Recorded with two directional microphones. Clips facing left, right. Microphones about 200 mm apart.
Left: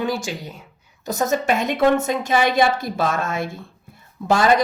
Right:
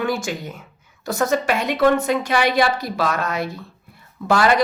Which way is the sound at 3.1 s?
25° left (ahead or behind).